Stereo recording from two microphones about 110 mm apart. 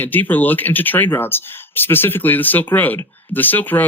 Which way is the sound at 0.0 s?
15° left (ahead or behind).